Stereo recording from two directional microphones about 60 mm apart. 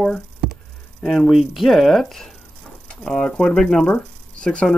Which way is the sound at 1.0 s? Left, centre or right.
Centre.